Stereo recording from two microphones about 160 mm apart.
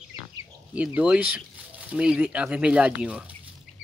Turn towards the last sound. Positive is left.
turn(degrees=-5)  # may be behind; listen again after turning